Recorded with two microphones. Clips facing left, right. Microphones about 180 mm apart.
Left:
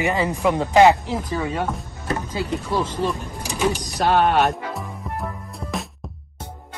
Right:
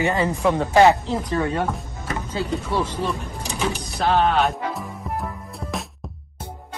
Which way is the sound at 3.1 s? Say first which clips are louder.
Left 1 dB; 5° left (ahead or behind).